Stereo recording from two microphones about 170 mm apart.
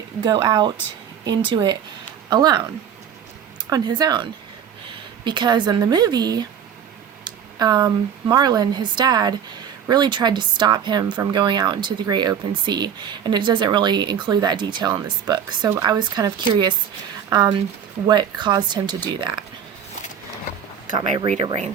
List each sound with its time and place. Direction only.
0.2 s speech: 25° right (ahead or behind)
3.7 s a woman's voice: 25° right (ahead or behind)